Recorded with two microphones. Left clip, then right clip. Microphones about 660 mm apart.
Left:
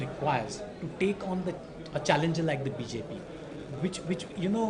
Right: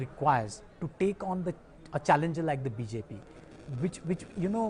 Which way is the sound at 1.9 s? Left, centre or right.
Right.